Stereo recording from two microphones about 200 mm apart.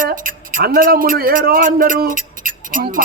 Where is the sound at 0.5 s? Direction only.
45° right (ahead or behind).